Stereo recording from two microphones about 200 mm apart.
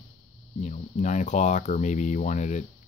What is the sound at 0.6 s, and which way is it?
Speech, 35° left (ahead or behind).